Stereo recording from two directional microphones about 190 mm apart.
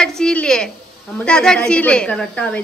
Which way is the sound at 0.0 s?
5° left (ahead or behind).